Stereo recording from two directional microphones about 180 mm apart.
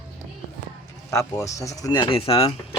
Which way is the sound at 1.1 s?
15° left (ahead or behind).